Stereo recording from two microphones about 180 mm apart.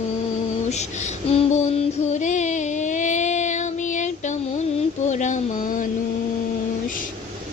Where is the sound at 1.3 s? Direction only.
35° left (ahead or behind).